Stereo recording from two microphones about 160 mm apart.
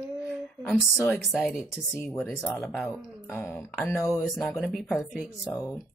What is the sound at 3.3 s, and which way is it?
Speech, 15° left (ahead or behind).